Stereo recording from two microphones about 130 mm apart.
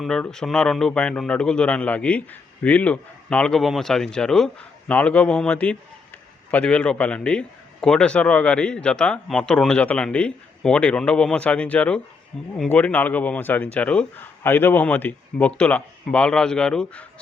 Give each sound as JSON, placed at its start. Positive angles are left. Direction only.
{"t": 0.0, "sound": "a man's voice", "side_deg": 5}